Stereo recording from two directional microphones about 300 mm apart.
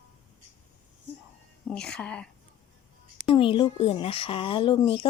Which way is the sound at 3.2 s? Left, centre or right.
Centre.